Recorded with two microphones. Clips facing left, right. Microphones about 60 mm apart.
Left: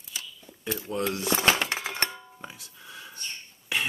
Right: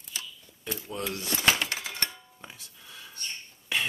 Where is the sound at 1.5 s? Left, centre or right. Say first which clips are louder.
Right 1 dB; left.